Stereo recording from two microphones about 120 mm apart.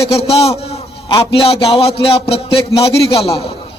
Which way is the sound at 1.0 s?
45° left (ahead or behind).